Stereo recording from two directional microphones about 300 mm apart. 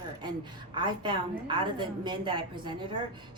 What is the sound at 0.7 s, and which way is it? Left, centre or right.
A woman's voice, centre.